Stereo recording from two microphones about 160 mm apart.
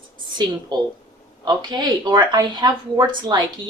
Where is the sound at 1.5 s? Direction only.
25° right (ahead or behind).